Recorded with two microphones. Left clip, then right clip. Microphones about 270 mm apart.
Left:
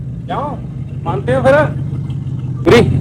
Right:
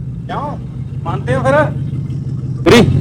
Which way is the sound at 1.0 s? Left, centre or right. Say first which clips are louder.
Left 3 dB; right.